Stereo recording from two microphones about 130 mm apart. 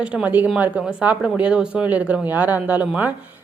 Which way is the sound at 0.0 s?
10° right (ahead or behind).